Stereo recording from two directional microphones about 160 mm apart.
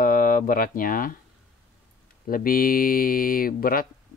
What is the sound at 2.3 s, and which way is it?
Speech, 60° left (ahead or behind).